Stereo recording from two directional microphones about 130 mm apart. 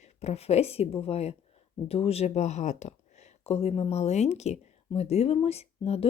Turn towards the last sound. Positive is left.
turn(degrees=50)  # may be behind; listen again after turning